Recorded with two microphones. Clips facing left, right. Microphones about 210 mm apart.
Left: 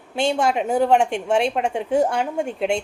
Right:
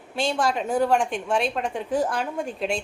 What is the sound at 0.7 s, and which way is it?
A woman's voice, 25° left (ahead or behind).